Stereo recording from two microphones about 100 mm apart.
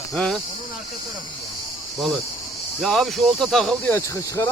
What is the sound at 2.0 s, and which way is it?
Speech, centre (ahead or behind).